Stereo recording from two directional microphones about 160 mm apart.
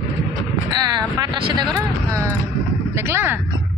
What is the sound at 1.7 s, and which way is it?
Speech, 20° right (ahead or behind).